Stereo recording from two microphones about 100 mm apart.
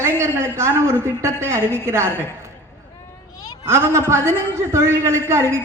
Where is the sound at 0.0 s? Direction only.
25° right (ahead or behind).